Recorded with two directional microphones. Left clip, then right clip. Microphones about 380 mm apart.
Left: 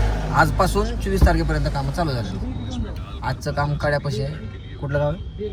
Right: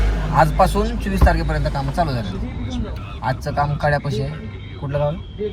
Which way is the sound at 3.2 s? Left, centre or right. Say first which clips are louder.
Right 4 dB; centre.